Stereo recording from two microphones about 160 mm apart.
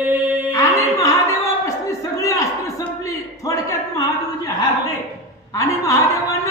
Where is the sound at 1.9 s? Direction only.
20° left (ahead or behind).